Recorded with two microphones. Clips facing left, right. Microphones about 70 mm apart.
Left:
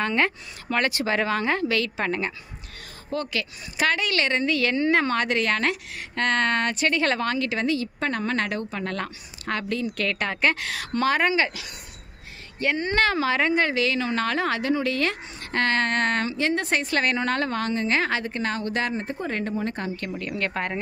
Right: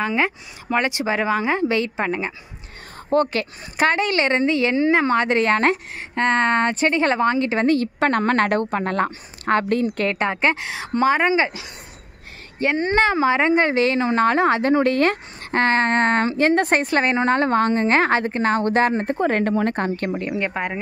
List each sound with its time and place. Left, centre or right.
0.0 s speech: centre
3.1 s a woman's voice: right
8.0 s speech: right
8.8 s a woman's voice: right
10.0 s a woman's voice: right
15.6 s a woman's voice: right
16.9 s a woman's voice: right
19.1 s speech: right
20.2 s speech: centre